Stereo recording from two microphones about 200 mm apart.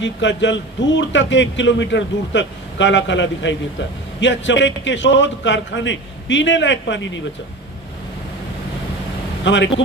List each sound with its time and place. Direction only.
0.0 s speech: 65° left (ahead or behind)
9.4 s speech: 65° left (ahead or behind)